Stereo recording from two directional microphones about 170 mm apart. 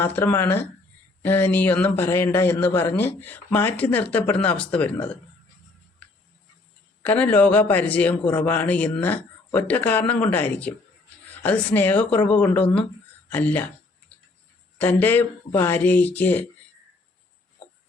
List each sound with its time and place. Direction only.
0.0 s a man's voice: 10° left (ahead or behind)
7.0 s a man's voice: 10° left (ahead or behind)
14.8 s a man's voice: 10° left (ahead or behind)